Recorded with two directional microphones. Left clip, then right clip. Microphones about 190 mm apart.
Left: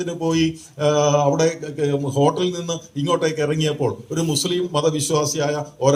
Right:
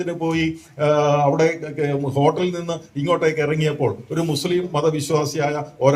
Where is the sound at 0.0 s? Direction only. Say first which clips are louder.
Left 1 dB; 40° right (ahead or behind).